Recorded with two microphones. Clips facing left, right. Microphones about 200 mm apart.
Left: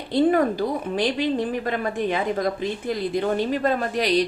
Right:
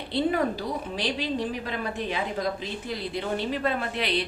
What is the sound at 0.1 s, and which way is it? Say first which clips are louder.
A woman's voice: left 6 dB; 50° left (ahead or behind).